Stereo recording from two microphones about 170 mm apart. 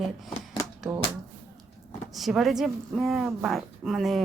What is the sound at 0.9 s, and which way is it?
Speech, 15° right (ahead or behind).